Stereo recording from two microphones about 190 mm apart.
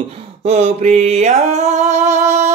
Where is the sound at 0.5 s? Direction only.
35° right (ahead or behind).